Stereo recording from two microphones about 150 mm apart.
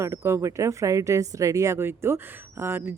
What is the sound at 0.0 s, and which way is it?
A woman's voice, 20° right (ahead or behind).